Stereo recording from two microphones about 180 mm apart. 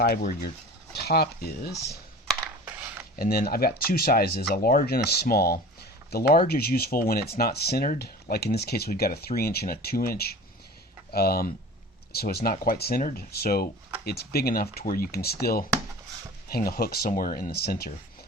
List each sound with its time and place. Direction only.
0.0 s speech: 55° left (ahead or behind)
3.2 s speech: 55° left (ahead or behind)